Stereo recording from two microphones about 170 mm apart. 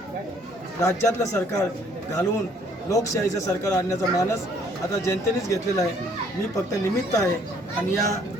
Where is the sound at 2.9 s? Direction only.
20° left (ahead or behind).